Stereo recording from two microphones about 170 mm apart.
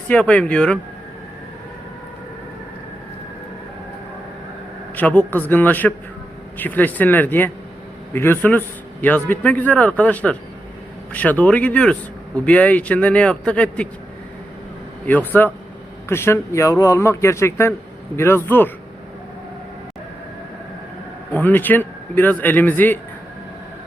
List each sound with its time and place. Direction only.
0.1 s a man's voice: 5° left (ahead or behind)
4.9 s a man's voice: 10° left (ahead or behind)
15.0 s a man's voice: 10° left (ahead or behind)
21.3 s a man's voice: 10° left (ahead or behind)